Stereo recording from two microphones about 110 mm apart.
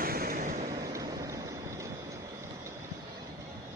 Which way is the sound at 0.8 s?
35° right (ahead or behind).